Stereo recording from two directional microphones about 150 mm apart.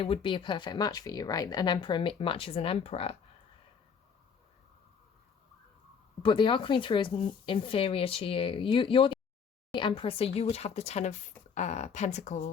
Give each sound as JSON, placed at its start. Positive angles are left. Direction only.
{"t": 0.0, "sound": "speech", "side_deg": 35}
{"t": 6.2, "sound": "speech", "side_deg": 35}